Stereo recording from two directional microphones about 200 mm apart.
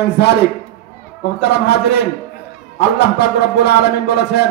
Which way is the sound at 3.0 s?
55° left (ahead or behind).